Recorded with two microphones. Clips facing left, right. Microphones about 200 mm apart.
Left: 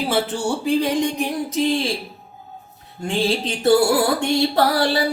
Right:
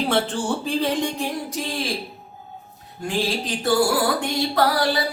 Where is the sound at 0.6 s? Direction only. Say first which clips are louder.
Left 7 dB; 15° left (ahead or behind).